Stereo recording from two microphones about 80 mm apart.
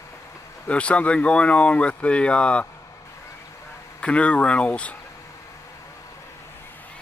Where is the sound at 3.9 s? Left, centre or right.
Centre.